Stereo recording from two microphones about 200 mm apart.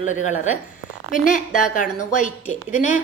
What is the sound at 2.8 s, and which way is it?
Speech, 35° left (ahead or behind).